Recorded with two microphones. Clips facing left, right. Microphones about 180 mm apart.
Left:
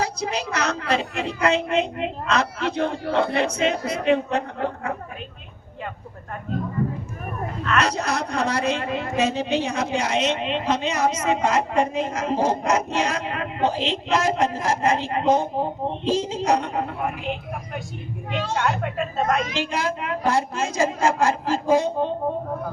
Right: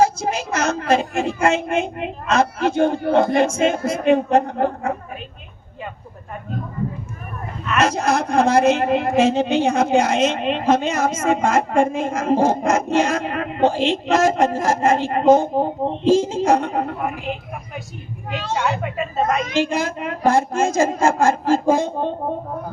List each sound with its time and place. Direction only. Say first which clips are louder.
0.0 s a woman's voice: right 7 dB; 45° right (ahead or behind)
7.8 s a woman's voice: right 6 dB; 50° right (ahead or behind)
8.8 s a woman's voice: right 7 dB; 60° right (ahead or behind)
18.3 s speech: right 2 dB; centre (ahead or behind)
19.5 s a woman's voice: right 5 dB; 45° right (ahead or behind)